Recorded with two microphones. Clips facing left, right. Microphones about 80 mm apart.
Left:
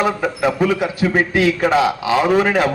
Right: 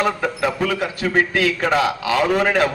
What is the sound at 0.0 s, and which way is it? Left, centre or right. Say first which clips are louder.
A man's voice: left 2 dB; centre.